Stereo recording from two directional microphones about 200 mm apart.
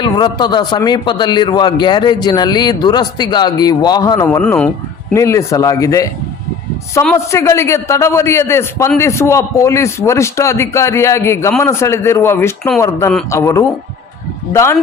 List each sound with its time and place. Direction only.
0.0 s a man's voice: 20° left (ahead or behind)
4.4 s speech: 5° left (ahead or behind)
5.1 s a man's voice: 15° left (ahead or behind)
7.3 s a man's voice: 15° left (ahead or behind)